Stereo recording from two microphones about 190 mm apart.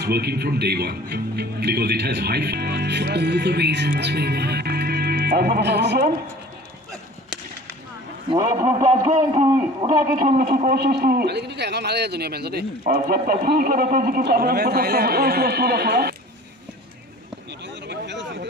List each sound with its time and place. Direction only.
0.0 s speech: 55° right (ahead or behind)
8.3 s a man's voice: 20° right (ahead or behind)
9.9 s speech: 45° right (ahead or behind)
17.8 s a sound: 65° right (ahead or behind)